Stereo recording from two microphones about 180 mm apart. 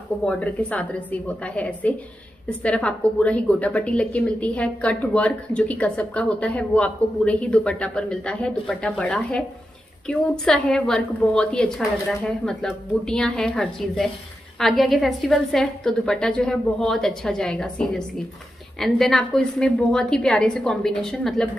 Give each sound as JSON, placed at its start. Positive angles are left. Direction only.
{"t": 0.2, "sound": "a woman's voice", "side_deg": 5}